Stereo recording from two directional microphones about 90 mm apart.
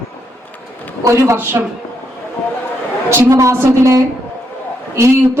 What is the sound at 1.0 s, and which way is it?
Speech, 30° right (ahead or behind).